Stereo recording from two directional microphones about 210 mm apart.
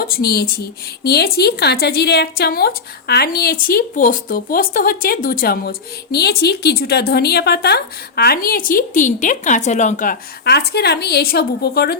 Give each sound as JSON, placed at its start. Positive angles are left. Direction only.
{"t": 0.0, "sound": "a woman's voice", "side_deg": 45}